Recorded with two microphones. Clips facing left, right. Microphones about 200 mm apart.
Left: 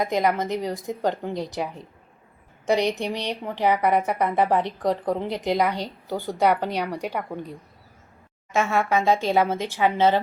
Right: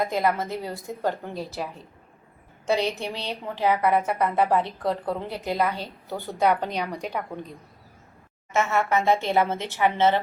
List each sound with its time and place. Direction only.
0.0 s a woman's voice: 15° left (ahead or behind)
2.6 s a woman's voice: 15° left (ahead or behind)
8.5 s a woman's voice: 15° left (ahead or behind)